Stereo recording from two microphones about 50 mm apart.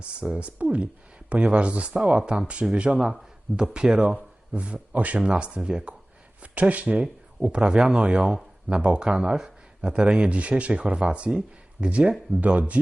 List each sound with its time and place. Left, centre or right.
0.0 s speech: right
6.4 s speech: right